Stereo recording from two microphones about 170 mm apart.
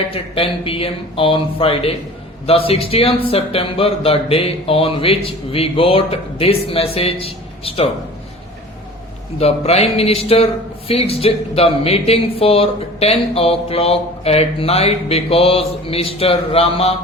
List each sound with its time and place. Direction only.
0.1 s a man's voice: 35° left (ahead or behind)
9.4 s speech: 35° left (ahead or behind)